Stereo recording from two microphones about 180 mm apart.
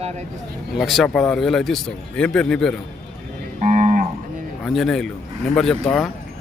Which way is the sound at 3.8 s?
45° right (ahead or behind).